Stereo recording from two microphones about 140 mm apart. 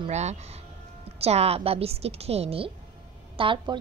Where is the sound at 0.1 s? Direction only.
55° right (ahead or behind).